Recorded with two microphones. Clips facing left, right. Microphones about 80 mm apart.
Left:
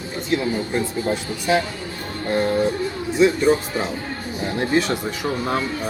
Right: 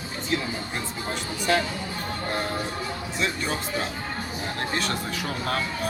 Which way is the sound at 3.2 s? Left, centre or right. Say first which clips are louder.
Left 13 dB; centre.